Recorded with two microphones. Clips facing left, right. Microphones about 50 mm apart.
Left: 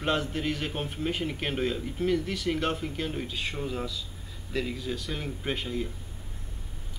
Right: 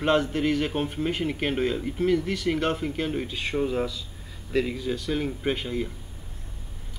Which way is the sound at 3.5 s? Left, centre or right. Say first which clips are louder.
Right 7 dB; centre.